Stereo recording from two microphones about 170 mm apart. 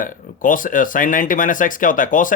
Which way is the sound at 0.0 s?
55° left (ahead or behind).